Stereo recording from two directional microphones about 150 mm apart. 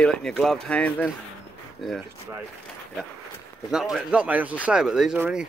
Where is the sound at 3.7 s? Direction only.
5° right (ahead or behind).